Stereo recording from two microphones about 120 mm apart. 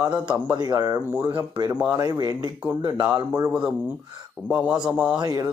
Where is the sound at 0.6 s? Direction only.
30° right (ahead or behind).